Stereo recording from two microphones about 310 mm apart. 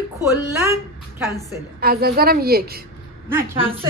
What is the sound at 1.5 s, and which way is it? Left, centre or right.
A woman's voice, right.